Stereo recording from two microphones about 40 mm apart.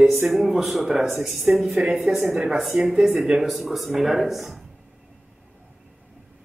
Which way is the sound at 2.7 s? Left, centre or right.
Right.